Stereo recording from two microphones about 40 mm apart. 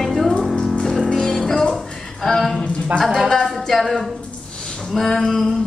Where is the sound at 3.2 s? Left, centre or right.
Centre.